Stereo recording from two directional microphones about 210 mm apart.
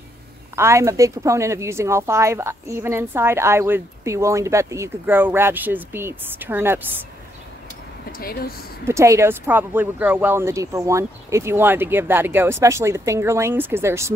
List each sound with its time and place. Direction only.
0.6 s a woman's voice: 15° right (ahead or behind)
8.2 s speech: 45° left (ahead or behind)
8.8 s a woman's voice: 15° right (ahead or behind)